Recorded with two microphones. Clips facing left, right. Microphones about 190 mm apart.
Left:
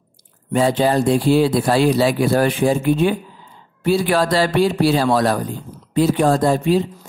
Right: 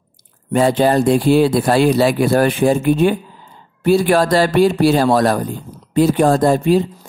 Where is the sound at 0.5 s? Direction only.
55° right (ahead or behind).